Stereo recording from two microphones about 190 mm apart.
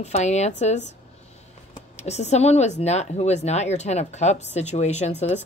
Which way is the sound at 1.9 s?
35° left (ahead or behind).